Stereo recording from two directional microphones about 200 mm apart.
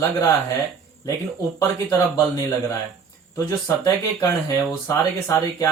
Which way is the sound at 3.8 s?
15° left (ahead or behind).